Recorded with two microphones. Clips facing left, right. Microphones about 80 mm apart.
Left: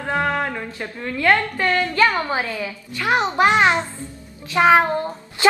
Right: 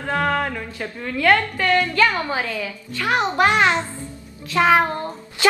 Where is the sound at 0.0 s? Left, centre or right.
Centre.